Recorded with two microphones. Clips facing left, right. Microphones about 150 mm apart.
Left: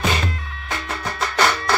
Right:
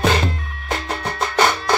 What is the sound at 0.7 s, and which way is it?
Music, 35° right (ahead or behind).